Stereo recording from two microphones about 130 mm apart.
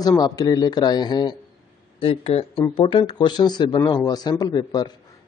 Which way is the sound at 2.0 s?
45° left (ahead or behind).